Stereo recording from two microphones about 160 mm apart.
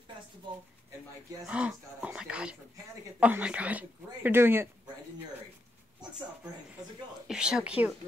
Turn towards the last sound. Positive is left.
turn(degrees=-5)  # may be behind; listen again after turning